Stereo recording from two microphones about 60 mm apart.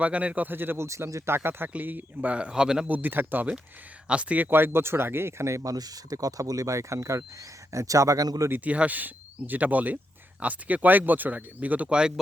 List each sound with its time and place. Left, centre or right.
0.0 s speech: right
0.9 s speech: right; by 2.8 s centre
2.8 s speech: right
4.1 s speech: right
4.4 s speech: right
8.6 s speech: right
11.9 s speech: centre